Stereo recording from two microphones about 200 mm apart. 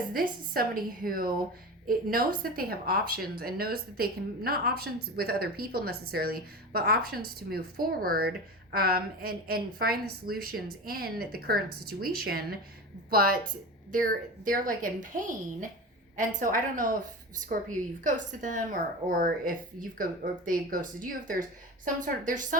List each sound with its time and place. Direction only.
0.1 s a woman's voice: 45° right (ahead or behind)